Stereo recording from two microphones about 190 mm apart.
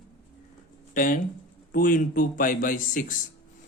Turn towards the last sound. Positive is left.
turn(degrees=45)  # may be behind; listen again after turning